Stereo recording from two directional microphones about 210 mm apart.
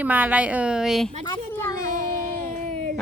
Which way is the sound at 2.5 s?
35° right (ahead or behind).